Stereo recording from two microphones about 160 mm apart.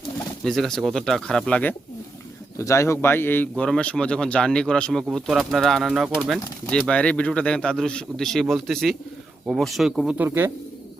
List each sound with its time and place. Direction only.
0.4 s speech: 5° left (ahead or behind)
2.6 s a man's voice: 20° left (ahead or behind); by 10.5 s 15° right (ahead or behind)